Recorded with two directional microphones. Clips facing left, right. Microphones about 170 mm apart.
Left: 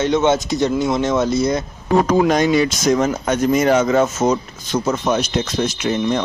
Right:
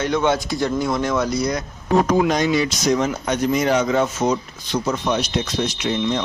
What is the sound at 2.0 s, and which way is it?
Speech, 50° left (ahead or behind).